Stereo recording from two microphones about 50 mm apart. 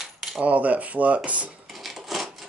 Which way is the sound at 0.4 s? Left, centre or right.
Right.